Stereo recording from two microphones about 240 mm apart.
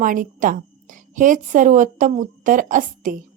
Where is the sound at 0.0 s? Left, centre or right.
Right.